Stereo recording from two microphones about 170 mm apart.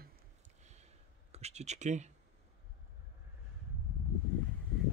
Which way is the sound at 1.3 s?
40° right (ahead or behind).